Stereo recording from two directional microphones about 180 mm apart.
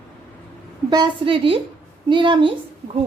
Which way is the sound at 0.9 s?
25° right (ahead or behind).